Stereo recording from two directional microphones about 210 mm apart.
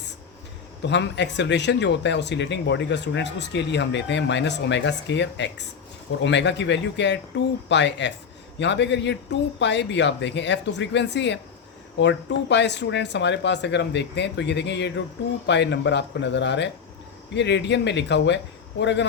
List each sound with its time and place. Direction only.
0.8 s speech: 55° left (ahead or behind)